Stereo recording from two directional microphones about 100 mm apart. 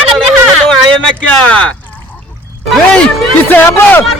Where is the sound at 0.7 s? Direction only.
15° left (ahead or behind).